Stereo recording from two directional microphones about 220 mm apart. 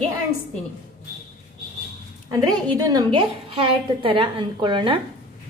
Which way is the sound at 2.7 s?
15° right (ahead or behind).